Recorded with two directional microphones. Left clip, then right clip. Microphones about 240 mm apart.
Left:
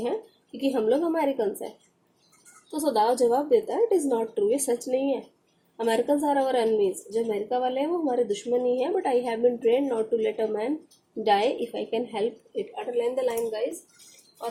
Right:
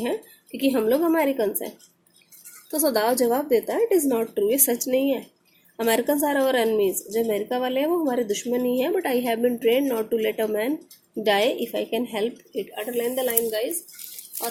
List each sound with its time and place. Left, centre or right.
0.5 s a woman's voice: right
2.7 s a woman's voice: right
3.0 s a woman's voice: right